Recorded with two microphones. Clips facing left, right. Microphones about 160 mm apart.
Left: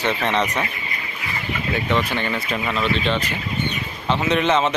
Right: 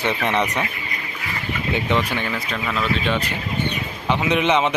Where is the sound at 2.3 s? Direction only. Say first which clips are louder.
Left 1 dB; centre (ahead or behind).